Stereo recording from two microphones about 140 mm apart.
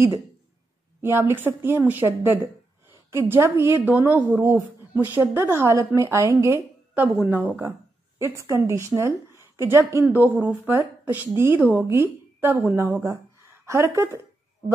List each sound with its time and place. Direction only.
1.0 s a woman's voice: 15° right (ahead or behind)
13.9 s a woman's voice: 20° right (ahead or behind)